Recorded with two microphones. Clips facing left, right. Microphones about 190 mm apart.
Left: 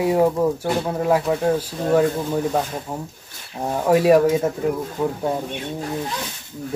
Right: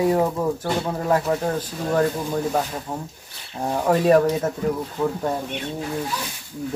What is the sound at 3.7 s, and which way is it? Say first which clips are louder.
Speech: left 2 dB; 10° left (ahead or behind).